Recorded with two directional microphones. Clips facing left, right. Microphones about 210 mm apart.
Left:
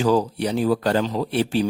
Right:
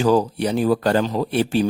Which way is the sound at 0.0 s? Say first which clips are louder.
Right 2 dB; 50° right (ahead or behind).